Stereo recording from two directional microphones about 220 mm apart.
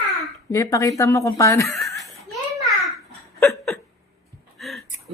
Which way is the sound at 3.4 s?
10° left (ahead or behind).